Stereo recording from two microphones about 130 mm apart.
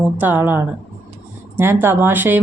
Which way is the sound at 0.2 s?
15° right (ahead or behind).